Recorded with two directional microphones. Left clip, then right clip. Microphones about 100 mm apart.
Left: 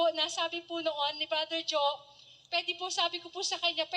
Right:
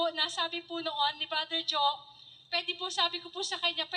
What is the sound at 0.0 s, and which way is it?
A woman's voice, 20° left (ahead or behind).